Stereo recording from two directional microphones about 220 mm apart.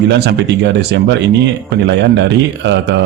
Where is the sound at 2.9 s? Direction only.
55° right (ahead or behind).